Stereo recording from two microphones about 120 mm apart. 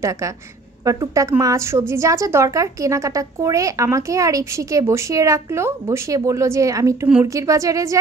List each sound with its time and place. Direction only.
0.8 s a woman's voice: 25° right (ahead or behind)